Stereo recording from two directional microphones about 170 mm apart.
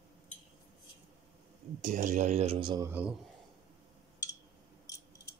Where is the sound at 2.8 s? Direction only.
10° right (ahead or behind).